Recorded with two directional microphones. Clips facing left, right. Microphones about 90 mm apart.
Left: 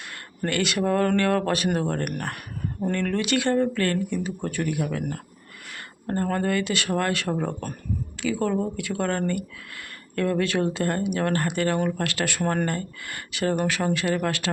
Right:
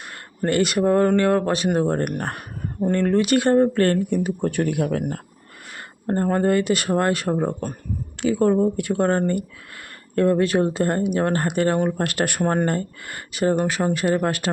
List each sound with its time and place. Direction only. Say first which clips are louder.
0.4 s speech: right 5 dB; 40° right (ahead or behind)
0.9 s speech: right 4 dB; 25° right (ahead or behind); by 5.2 s 45° right (ahead or behind)
6.1 s speech: right 5 dB; 25° right (ahead or behind)
7.3 s speech: right 4 dB; 25° right (ahead or behind)
12.0 s speech: right 4 dB; 50° right (ahead or behind)
12.4 s speech: right 4 dB; 35° right (ahead or behind)